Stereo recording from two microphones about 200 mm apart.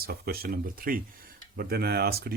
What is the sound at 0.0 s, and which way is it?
Speech, 50° right (ahead or behind).